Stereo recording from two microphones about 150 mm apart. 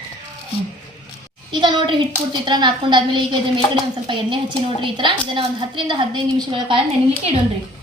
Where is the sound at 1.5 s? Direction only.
30° right (ahead or behind).